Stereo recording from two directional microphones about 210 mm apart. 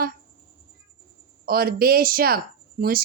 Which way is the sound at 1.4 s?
45° right (ahead or behind).